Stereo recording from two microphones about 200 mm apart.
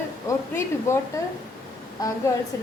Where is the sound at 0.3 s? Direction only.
15° left (ahead or behind).